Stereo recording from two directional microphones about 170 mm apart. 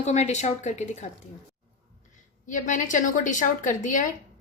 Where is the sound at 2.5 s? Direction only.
50° left (ahead or behind).